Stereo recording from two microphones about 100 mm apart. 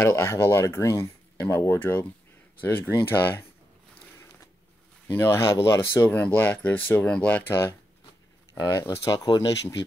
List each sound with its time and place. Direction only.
0.0 s speech: 25° left (ahead or behind)
5.0 s speech: 20° left (ahead or behind)
8.6 s speech: 30° left (ahead or behind)